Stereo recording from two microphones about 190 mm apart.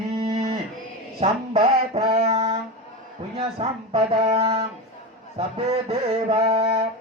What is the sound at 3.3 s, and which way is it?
Speech, 30° right (ahead or behind).